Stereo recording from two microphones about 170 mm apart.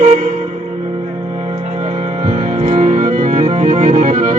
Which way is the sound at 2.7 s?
45° right (ahead or behind).